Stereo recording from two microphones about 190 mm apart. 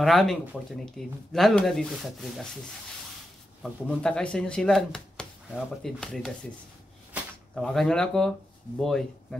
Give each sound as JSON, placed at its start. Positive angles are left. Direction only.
{"t": 0.0, "sound": "speech", "side_deg": 0}
{"t": 3.8, "sound": "speech", "side_deg": 5}
{"t": 7.5, "sound": "speech", "side_deg": 0}